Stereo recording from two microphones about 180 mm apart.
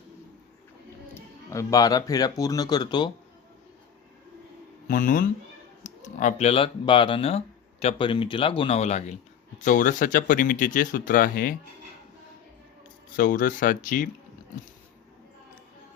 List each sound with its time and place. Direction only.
1.1 s speech: 15° left (ahead or behind)
4.9 s speech: 45° left (ahead or behind)
13.1 s speech: 50° left (ahead or behind)